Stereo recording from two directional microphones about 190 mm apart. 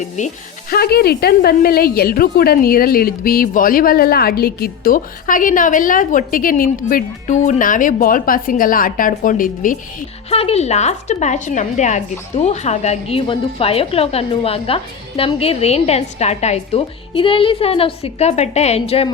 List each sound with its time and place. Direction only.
0.2 s a woman's voice: 40° left (ahead or behind)
0.7 s a woman's voice: 55° left (ahead or behind)
10.2 s a woman's voice: 30° left (ahead or behind)